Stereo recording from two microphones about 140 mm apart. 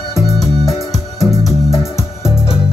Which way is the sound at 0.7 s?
25° left (ahead or behind).